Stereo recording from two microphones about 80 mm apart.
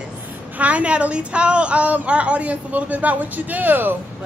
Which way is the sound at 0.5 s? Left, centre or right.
Centre.